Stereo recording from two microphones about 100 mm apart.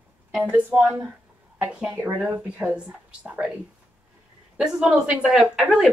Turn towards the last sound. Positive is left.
turn(degrees=-10)  # may be behind; listen again after turning